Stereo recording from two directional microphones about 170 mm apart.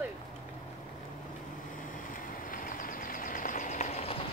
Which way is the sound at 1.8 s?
55° left (ahead or behind).